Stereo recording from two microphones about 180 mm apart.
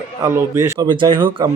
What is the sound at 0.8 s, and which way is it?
Speech, 25° right (ahead or behind).